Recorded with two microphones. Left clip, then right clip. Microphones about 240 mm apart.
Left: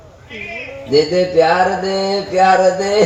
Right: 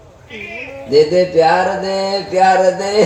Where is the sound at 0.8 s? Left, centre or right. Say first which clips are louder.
Right 2 dB; right.